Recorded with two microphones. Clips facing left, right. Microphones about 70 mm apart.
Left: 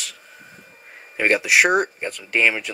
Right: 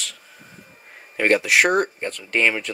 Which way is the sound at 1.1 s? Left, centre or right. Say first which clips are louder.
Even; centre.